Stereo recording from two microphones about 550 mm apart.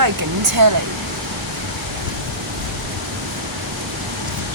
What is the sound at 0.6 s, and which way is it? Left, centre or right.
Speech, right.